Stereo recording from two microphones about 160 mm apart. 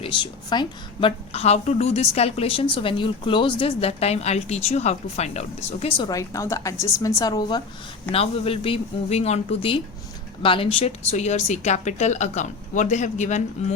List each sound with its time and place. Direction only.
0.0 s a woman's voice: 30° left (ahead or behind)
1.3 s a woman's voice: 40° left (ahead or behind)
6.0 s a woman's voice: 20° left (ahead or behind)
8.1 s a woman's voice: 35° left (ahead or behind)